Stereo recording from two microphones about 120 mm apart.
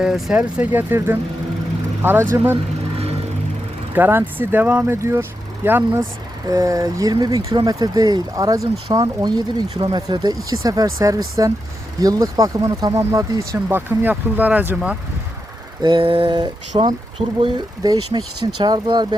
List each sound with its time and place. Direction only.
0.0 s speech: 5° right (ahead or behind)
3.9 s speech: 15° right (ahead or behind)
6.5 s speech: 30° right (ahead or behind)
15.8 s speech: 45° right (ahead or behind)